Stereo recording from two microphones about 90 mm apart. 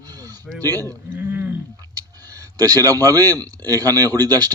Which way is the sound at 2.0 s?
40° right (ahead or behind).